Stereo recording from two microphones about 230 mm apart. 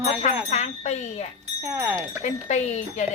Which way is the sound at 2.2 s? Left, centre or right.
Left.